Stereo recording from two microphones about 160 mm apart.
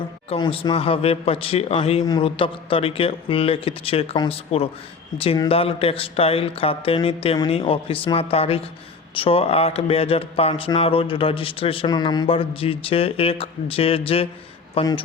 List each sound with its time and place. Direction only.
0.3 s speech: 35° left (ahead or behind)